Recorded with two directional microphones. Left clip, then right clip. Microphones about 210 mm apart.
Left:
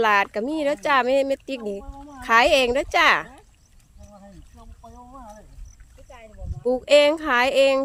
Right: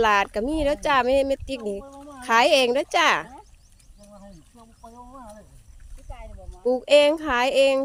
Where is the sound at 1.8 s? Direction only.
30° right (ahead or behind).